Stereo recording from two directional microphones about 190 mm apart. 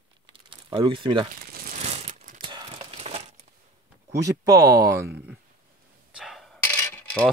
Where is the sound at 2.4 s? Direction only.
25° right (ahead or behind).